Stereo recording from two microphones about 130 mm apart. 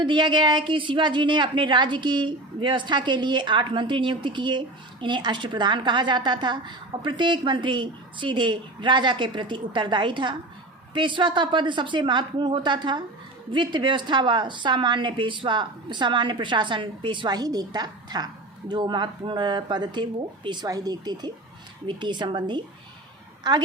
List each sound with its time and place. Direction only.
0.0 s a woman's voice: 35° right (ahead or behind)